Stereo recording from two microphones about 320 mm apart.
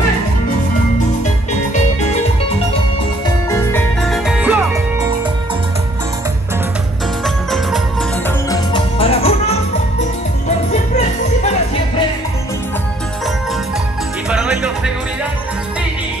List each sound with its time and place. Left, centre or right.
1.7 s music: left
3.4 s music: centre
7.2 s music: centre
8.5 s music: centre
10.7 s music: left
14.3 s music: centre